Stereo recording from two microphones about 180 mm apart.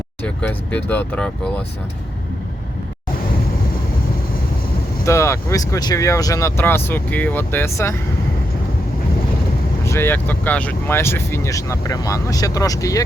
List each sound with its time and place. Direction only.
0.2 s speech: 10° left (ahead or behind)
5.0 s speech: 15° left (ahead or behind)
9.8 s speech: 15° left (ahead or behind)